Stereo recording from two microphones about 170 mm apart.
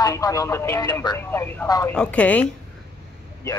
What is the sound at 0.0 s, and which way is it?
A man's voice, 20° left (ahead or behind).